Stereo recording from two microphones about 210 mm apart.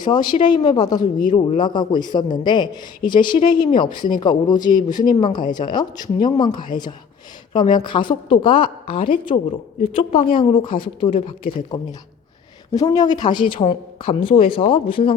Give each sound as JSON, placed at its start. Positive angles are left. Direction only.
{"t": 0.0, "sound": "a man's voice", "side_deg": 20}